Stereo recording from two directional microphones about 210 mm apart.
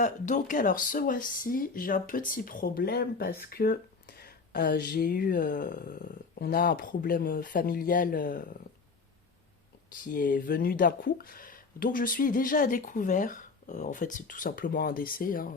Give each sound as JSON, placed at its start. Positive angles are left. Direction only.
{"t": 0.0, "sound": "speech", "side_deg": 35}
{"t": 10.1, "sound": "speech", "side_deg": 40}